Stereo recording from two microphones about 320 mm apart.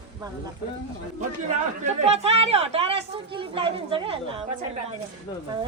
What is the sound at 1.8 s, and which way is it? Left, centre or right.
Speech, centre.